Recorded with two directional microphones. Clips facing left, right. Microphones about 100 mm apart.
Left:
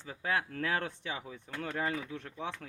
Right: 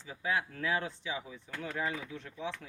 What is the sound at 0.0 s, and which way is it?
Speech, 55° left (ahead or behind).